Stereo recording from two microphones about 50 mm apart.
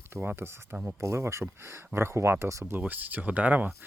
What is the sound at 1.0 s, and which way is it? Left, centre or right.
Speech, right.